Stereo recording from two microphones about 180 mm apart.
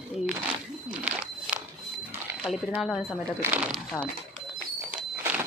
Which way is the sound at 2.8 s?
Centre (ahead or behind).